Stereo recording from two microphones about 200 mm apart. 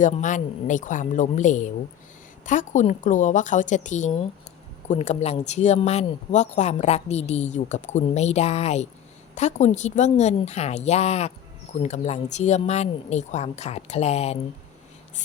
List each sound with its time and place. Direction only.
0.0 s speech: 40° left (ahead or behind)